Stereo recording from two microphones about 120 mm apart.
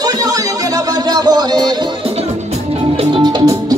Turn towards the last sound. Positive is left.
turn(degrees=-35)  # may be behind; listen again after turning